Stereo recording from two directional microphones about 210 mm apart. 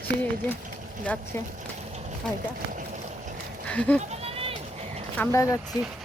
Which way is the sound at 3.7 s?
5° left (ahead or behind).